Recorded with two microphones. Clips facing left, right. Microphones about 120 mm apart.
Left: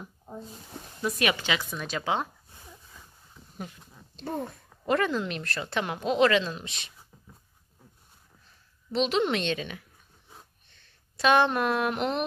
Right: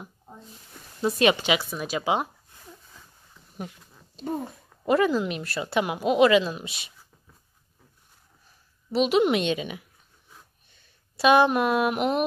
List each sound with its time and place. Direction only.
1.0 s speech: 30° right (ahead or behind)
1.3 s a woman's voice: 15° right (ahead or behind)
3.5 s speech: 5° right (ahead or behind)
8.9 s a woman's voice: 10° right (ahead or behind)